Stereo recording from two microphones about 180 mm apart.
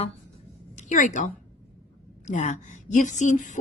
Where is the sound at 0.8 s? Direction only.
45° left (ahead or behind).